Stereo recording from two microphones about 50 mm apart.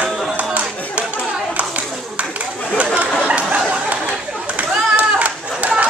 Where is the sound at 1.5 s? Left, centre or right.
Right.